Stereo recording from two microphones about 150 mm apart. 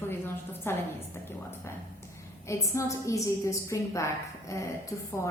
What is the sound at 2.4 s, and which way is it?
Speech, 20° left (ahead or behind).